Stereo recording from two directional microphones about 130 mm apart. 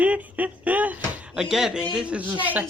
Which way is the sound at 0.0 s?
10° right (ahead or behind).